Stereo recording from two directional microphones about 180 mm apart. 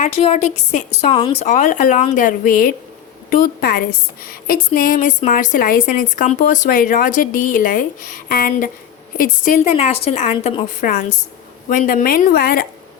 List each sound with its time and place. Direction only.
0.0 s a woman's voice: 35° left (ahead or behind)
1.1 s speech: 25° left (ahead or behind)
1.5 s a woman's voice: 45° left (ahead or behind)
9.7 s a woman's voice: 35° left (ahead or behind)
10.8 s a woman's voice: 45° left (ahead or behind)